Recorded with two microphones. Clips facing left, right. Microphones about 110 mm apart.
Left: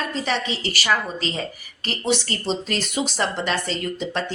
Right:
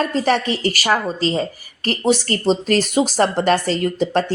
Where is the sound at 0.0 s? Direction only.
45° right (ahead or behind).